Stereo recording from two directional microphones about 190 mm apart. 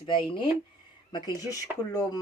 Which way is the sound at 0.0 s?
25° left (ahead or behind).